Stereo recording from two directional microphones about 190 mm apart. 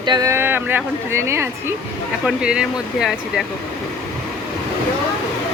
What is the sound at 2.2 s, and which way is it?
Speech, 5° right (ahead or behind).